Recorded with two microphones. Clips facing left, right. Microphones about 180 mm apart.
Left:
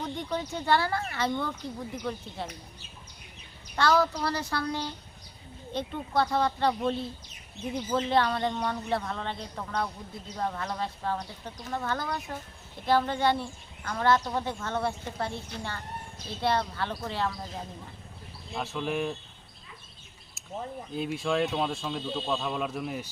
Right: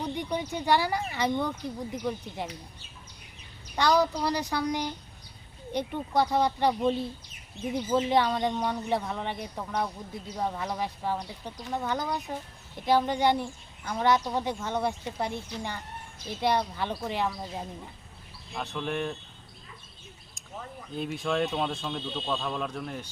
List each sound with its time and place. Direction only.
0.0 s a sound: 15° right (ahead or behind)
0.5 s speech: 15° right (ahead or behind)
3.8 s speech: 15° right (ahead or behind)
18.5 s speech: centre (ahead or behind)
20.9 s speech: centre (ahead or behind)